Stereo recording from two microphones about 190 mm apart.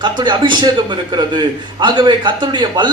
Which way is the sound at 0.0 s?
25° right (ahead or behind).